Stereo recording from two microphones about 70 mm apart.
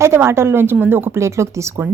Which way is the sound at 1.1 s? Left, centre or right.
Right.